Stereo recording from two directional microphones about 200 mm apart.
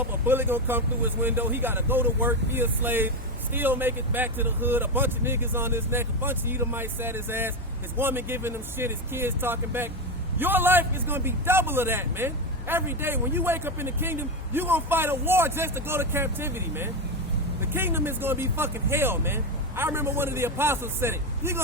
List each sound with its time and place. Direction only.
0.0 s a man's voice: 10° right (ahead or behind)